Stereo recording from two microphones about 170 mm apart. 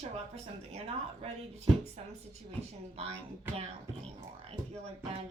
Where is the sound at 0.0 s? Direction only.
40° right (ahead or behind).